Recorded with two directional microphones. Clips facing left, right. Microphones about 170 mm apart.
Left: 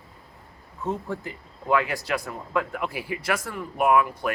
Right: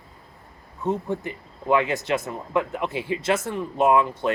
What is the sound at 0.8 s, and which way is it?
Speech, 20° right (ahead or behind).